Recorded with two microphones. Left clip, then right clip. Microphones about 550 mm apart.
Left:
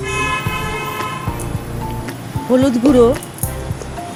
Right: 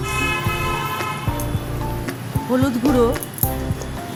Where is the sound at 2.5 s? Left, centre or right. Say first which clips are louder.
Left 6 dB; right.